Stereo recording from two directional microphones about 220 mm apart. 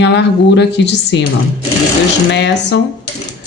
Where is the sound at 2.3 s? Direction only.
50° left (ahead or behind).